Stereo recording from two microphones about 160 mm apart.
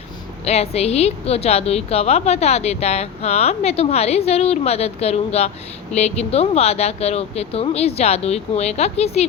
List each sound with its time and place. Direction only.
0.4 s a woman's voice: 40° left (ahead or behind)